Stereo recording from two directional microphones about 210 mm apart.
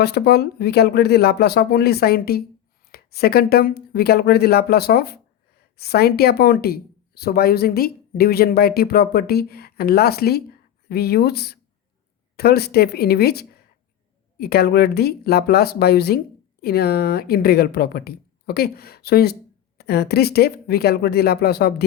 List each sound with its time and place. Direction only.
0.0 s speech: 50° left (ahead or behind)